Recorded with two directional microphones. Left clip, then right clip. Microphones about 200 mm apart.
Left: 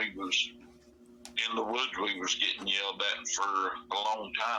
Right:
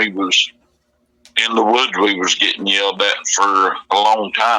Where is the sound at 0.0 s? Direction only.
50° right (ahead or behind).